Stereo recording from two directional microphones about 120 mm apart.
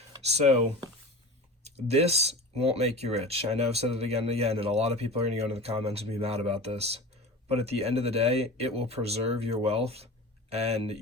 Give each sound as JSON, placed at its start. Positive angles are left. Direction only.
{"t": 0.3, "sound": "speech", "side_deg": -65}
{"t": 1.6, "sound": "speech", "side_deg": -60}